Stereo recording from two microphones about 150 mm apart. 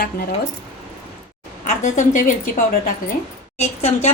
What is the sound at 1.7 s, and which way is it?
A woman's voice, 55° left (ahead or behind).